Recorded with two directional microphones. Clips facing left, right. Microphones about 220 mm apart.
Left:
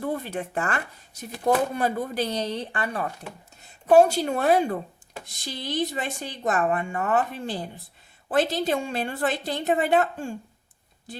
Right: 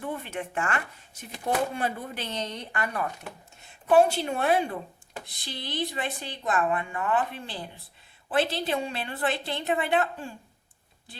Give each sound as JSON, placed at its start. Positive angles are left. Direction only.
{"t": 0.0, "sound": "speech", "side_deg": 40}
{"t": 3.7, "sound": "speech", "side_deg": 40}